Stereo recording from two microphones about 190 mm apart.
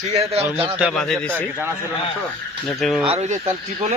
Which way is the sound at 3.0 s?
35° right (ahead or behind).